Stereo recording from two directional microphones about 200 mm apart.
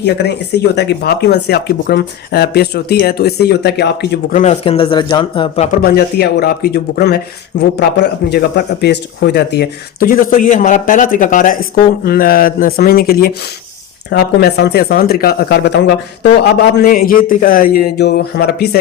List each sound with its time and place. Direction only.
0.0 s speech: 55° left (ahead or behind)
4.3 s speech: 40° left (ahead or behind)
4.6 s speech: 25° left (ahead or behind)
5.7 s speech: 50° left (ahead or behind)